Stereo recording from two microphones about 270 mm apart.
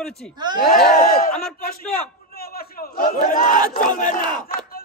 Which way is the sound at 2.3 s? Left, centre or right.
Left.